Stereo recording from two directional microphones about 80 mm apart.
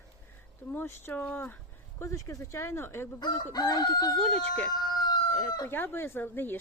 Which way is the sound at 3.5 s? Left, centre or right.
Left.